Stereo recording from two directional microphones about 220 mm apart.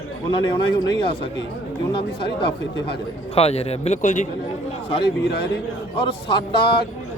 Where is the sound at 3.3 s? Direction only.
30° left (ahead or behind).